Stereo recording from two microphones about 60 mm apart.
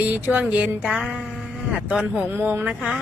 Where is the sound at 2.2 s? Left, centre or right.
Right.